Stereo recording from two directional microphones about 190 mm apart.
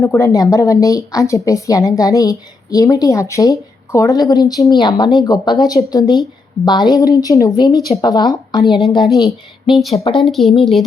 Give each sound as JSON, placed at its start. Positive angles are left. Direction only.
{"t": 0.0, "sound": "a woman's voice", "side_deg": 15}
{"t": 10.2, "sound": "speech", "side_deg": 0}